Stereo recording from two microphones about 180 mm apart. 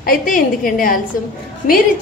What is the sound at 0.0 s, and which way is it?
A woman's voice, 50° left (ahead or behind).